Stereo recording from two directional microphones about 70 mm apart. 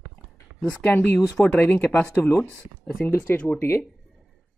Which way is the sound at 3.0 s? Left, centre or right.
Left.